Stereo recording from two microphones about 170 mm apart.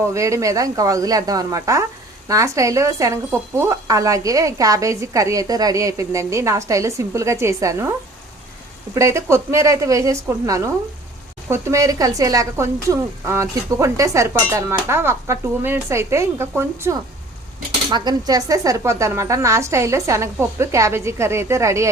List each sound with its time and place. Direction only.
0.0 s speech: 20° right (ahead or behind)
9.0 s speech: 15° right (ahead or behind)